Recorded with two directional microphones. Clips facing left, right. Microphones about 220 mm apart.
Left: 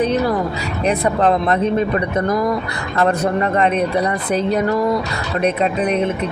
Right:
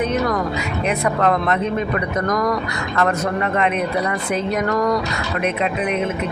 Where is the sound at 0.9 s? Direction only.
30° left (ahead or behind).